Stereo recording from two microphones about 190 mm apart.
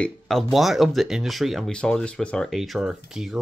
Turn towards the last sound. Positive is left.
turn(degrees=0)  # may be behind; listen again after turning